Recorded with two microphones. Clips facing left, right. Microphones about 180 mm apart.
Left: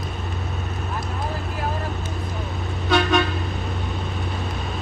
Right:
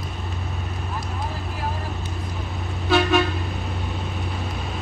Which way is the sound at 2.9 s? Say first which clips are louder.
Right 1 dB; 5° right (ahead or behind).